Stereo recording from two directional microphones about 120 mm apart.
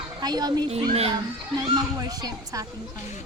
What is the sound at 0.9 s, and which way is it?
Speech, 55° right (ahead or behind).